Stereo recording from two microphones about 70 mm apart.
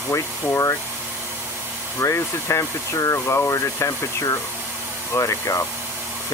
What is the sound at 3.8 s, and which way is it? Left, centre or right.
Speech, left.